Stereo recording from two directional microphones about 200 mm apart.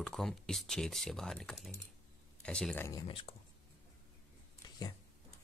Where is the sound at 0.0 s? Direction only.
Centre (ahead or behind); by 3.3 s 25° left (ahead or behind).